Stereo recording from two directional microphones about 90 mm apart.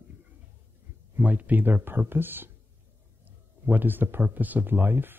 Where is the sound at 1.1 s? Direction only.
20° right (ahead or behind).